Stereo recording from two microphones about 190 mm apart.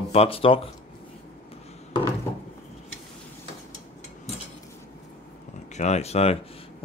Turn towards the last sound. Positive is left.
turn(degrees=35)  # may be behind; listen again after turning